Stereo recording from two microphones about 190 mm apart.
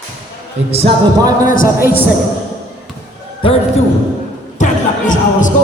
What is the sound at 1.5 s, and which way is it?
Speech, 50° left (ahead or behind).